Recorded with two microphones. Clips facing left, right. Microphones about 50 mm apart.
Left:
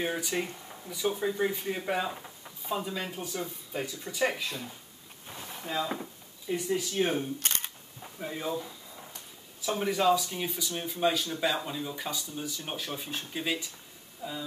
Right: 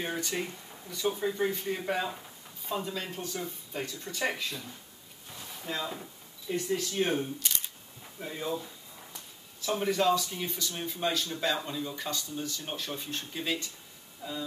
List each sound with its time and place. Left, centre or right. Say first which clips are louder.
0.0 s speech: left 2 dB; centre
5.7 s speech: left 3 dB; centre
7.3 s camera: left 2 dB; left
8.2 s speech: left 1 dB; centre
9.6 s speech: even; centre